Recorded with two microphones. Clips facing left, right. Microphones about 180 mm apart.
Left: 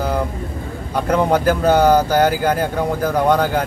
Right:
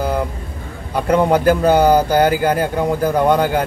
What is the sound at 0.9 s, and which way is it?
Speech, 10° right (ahead or behind).